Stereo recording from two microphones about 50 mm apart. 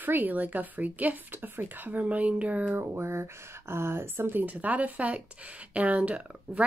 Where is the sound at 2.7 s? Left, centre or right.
Right.